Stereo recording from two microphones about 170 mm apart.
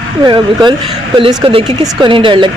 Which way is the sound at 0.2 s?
25° right (ahead or behind).